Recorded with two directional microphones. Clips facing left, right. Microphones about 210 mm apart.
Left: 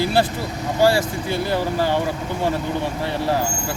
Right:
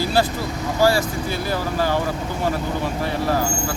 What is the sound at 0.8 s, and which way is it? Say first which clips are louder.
Speech: left 1 dB; 25° left (ahead or behind).